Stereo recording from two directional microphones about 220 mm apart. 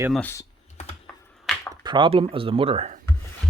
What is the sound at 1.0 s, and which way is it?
Computer keyboard, centre (ahead or behind).